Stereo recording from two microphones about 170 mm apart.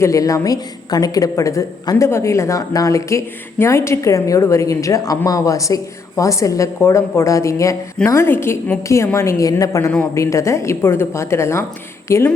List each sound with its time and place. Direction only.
0.0 s a woman's voice: 20° left (ahead or behind)